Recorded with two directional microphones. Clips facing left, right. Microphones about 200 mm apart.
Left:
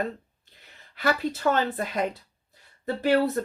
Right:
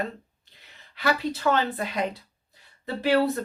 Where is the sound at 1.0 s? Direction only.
50° left (ahead or behind).